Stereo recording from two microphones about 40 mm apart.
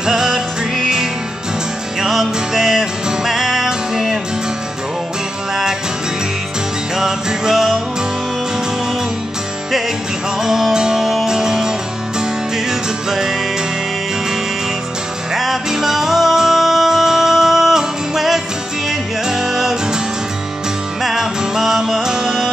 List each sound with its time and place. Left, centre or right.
0.0 s music: centre
2.0 s music: centre
7.0 s music: centre
10.4 s music: centre
15.3 s music: centre
21.0 s music: centre